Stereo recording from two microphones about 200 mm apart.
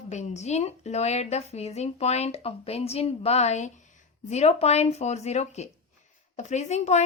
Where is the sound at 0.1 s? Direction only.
35° left (ahead or behind).